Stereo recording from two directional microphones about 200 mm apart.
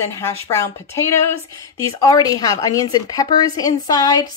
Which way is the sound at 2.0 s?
20° left (ahead or behind).